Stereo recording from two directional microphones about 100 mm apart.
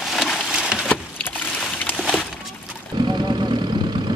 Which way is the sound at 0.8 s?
20° left (ahead or behind).